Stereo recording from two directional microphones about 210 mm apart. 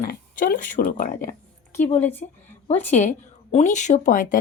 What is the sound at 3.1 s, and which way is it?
Speech, 35° left (ahead or behind).